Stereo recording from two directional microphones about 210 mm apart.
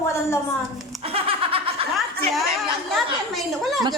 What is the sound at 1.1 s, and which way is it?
Snicker, 25° right (ahead or behind).